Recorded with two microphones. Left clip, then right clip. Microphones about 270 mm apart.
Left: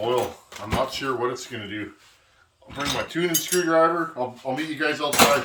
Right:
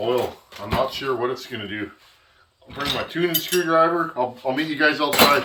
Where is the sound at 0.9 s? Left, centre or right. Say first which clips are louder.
Right 2 dB; centre.